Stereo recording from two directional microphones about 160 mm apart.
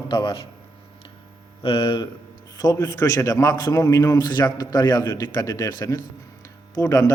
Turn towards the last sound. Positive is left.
turn(degrees=20)  # may be behind; listen again after turning